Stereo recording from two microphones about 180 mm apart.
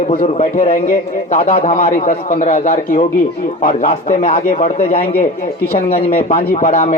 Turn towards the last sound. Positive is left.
turn(degrees=35)  # may be behind; listen again after turning